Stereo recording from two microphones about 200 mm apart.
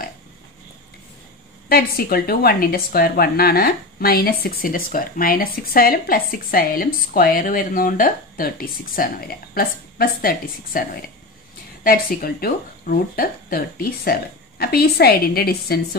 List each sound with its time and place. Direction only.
1.7 s speech: 50° left (ahead or behind)